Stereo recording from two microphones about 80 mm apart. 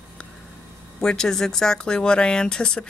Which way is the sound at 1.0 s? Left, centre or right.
Centre.